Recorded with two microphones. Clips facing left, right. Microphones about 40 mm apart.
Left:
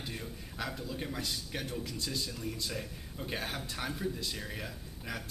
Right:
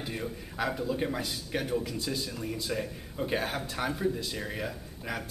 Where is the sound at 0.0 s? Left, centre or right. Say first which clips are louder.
Right 6 dB; centre.